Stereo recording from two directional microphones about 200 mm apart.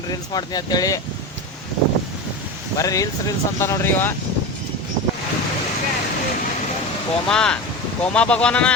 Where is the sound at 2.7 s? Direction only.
15° left (ahead or behind).